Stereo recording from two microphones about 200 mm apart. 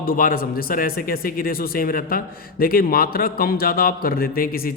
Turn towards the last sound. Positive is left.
turn(degrees=45)  # may be behind; listen again after turning